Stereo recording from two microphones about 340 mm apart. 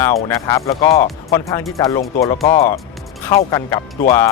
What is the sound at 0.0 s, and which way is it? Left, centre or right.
Speech, centre.